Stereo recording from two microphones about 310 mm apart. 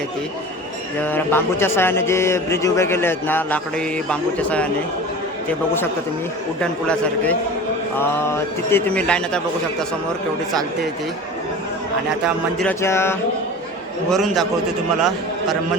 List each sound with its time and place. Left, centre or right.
1.0 s speech: centre
6.6 s a man's voice: centre
8.7 s a man's voice: centre
12.2 s a man's voice: centre